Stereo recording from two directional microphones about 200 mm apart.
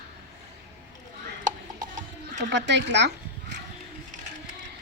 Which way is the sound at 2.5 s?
60° right (ahead or behind).